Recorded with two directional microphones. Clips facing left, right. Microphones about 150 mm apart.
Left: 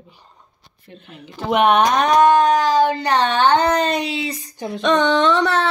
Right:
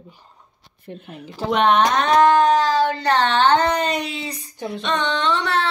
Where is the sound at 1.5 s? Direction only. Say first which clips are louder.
Left 2 dB; 10° left (ahead or behind).